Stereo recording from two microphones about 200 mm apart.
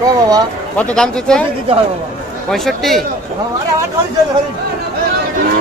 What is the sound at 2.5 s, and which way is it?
Speech, centre (ahead or behind).